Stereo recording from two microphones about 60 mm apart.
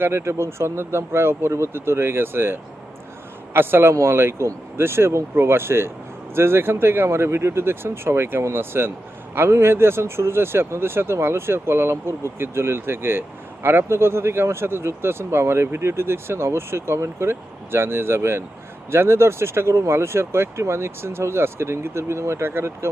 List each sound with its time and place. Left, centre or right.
0.0 s speech: right